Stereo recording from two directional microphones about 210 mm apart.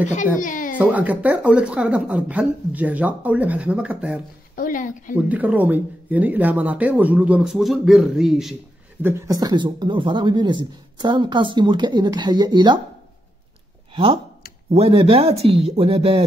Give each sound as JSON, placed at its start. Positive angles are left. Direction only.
{"t": 0.0, "sound": "speech", "side_deg": 35}
{"t": 0.7, "sound": "speech", "side_deg": -5}
{"t": 4.6, "sound": "speech", "side_deg": 40}
{"t": 5.1, "sound": "speech", "side_deg": -5}
{"t": 9.0, "sound": "speech", "side_deg": -15}
{"t": 13.9, "sound": "speech", "side_deg": -25}